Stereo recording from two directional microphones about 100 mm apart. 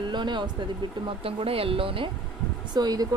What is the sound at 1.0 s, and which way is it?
Speech, 70° right (ahead or behind).